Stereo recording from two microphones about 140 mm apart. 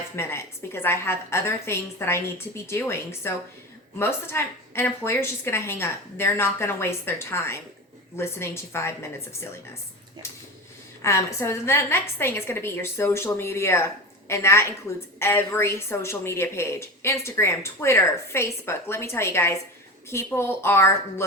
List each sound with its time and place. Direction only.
0.2 s a woman's voice: 15° left (ahead or behind)
10.2 s a woman's voice: 20° left (ahead or behind)